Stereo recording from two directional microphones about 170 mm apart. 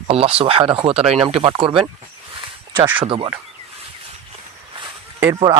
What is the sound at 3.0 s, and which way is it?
Speech, 35° right (ahead or behind).